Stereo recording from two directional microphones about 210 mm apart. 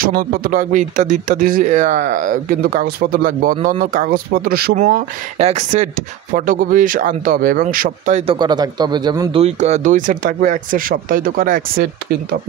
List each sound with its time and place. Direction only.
0.0 s speech: 45° right (ahead or behind)
5.4 s speech: 30° right (ahead or behind)
9.4 s speech: 30° right (ahead or behind)